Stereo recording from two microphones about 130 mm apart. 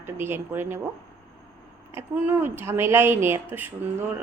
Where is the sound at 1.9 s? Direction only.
15° right (ahead or behind).